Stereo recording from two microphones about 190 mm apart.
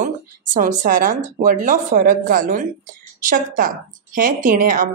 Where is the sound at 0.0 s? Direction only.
45° right (ahead or behind).